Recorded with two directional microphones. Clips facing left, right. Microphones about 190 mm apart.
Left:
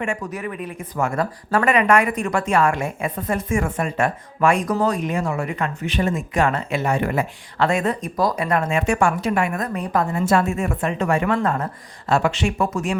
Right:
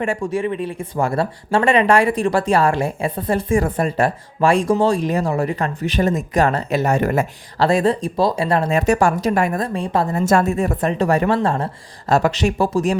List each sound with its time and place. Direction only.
0.0 s speech: 30° right (ahead or behind)